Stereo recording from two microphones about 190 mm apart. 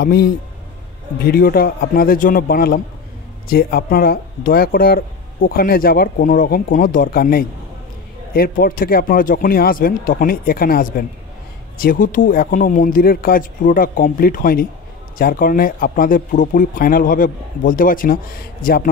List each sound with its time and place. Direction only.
0.0 s speech: 55° left (ahead or behind)